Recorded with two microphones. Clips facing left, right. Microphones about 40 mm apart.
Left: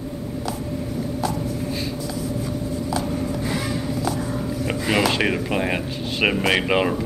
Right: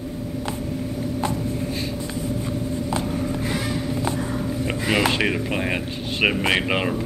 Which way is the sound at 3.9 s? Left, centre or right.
Right.